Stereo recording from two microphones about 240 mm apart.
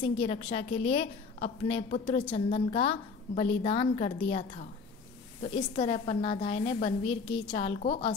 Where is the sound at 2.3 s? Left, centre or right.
Left.